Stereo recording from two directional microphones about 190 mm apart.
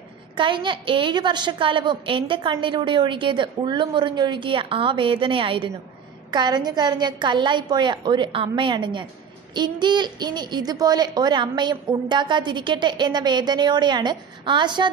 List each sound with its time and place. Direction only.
0.4 s a woman's voice: 25° right (ahead or behind)